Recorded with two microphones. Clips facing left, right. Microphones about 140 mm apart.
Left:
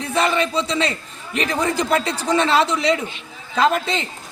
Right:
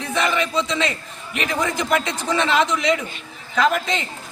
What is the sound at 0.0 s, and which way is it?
A man's voice, 35° left (ahead or behind).